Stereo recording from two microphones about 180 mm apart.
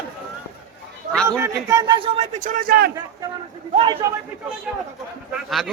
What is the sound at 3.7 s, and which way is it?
Speech, 30° right (ahead or behind).